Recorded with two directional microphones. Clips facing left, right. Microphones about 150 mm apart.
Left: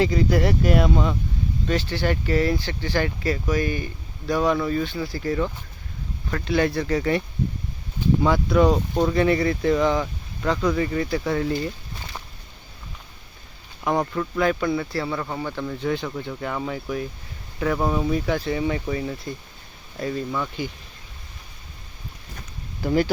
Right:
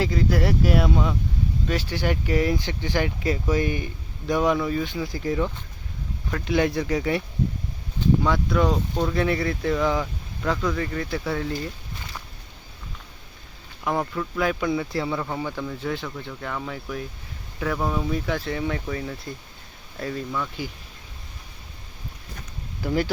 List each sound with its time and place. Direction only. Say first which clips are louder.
0.0 s speech: left 3 dB; centre (ahead or behind); by 4.5 s 20° right (ahead or behind)
4.5 s speech: left 1 dB; 5° right (ahead or behind)
8.2 s speech: left 4 dB; 5° left (ahead or behind)
13.9 s speech: left 3 dB; 5° left (ahead or behind)